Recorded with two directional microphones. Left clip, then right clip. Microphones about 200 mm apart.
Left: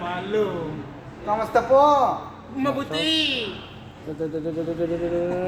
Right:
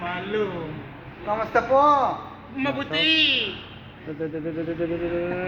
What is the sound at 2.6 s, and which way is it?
Speech, 30° left (ahead or behind).